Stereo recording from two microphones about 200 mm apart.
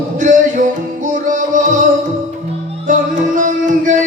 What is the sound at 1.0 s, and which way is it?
Music, 40° right (ahead or behind).